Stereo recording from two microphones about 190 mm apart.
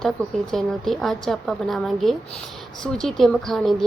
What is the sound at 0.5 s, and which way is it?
Speech, centre (ahead or behind).